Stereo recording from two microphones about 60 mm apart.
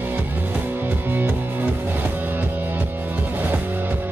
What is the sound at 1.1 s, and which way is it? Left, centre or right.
Music, right.